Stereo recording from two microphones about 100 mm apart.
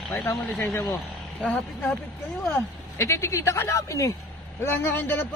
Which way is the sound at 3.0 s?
30° left (ahead or behind).